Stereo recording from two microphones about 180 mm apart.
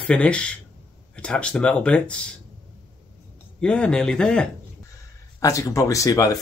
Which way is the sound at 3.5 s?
5° left (ahead or behind).